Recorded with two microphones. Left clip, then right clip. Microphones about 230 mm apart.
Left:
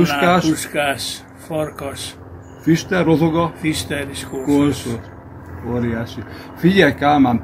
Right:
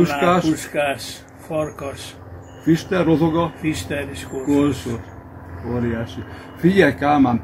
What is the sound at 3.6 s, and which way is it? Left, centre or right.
Speech, centre.